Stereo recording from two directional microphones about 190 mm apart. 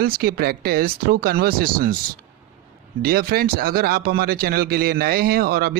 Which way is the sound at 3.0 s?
55° right (ahead or behind).